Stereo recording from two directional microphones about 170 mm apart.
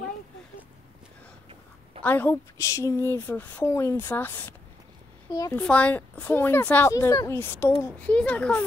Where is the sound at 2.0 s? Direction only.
10° left (ahead or behind).